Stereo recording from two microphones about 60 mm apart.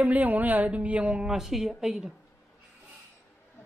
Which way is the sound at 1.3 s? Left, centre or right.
Centre.